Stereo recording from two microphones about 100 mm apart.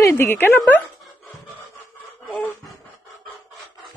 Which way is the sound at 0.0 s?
25° left (ahead or behind).